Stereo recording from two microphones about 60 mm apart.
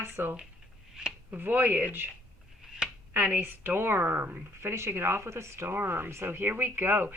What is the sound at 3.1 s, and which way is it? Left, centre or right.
Speech, right.